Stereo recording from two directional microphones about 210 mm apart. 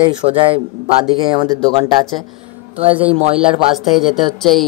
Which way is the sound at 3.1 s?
25° right (ahead or behind).